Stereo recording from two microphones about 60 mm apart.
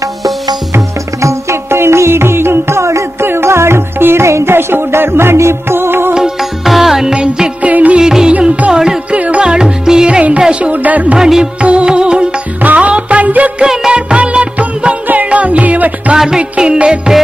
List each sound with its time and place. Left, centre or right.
0.0 s music: right
1.2 s music: right
3.3 s music: right
6.1 s music: centre
7.7 s music: right
8.0 s music: centre; by 11.1 s right
11.1 s music: centre
12.6 s music of bollywood: right
13.6 s music: centre
16.2 s music: centre